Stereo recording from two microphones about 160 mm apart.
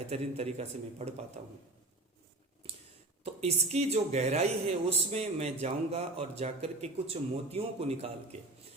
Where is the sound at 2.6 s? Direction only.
35° right (ahead or behind).